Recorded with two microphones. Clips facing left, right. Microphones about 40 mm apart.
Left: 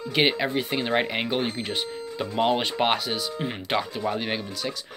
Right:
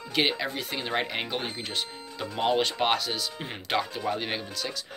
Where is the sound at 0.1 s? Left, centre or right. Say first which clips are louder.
Left 4 dB; centre.